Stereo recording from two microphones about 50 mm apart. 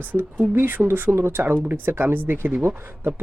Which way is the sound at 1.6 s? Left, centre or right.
Right.